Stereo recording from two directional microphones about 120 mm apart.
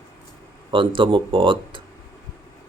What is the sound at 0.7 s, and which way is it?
Speech, 45° right (ahead or behind).